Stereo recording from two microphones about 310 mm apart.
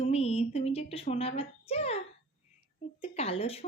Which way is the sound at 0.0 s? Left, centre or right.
Centre.